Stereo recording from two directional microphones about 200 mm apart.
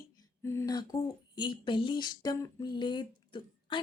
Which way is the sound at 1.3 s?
25° left (ahead or behind).